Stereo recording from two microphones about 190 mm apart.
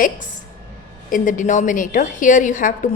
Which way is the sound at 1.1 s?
45° left (ahead or behind).